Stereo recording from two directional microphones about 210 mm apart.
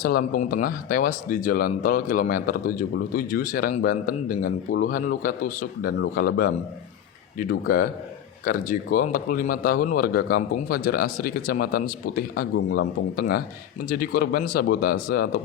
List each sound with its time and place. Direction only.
0.0 s a man's voice: 45° left (ahead or behind)